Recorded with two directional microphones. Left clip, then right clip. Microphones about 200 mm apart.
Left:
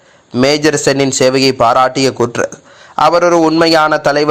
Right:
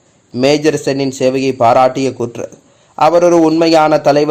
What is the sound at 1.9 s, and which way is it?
Speech, 5° left (ahead or behind).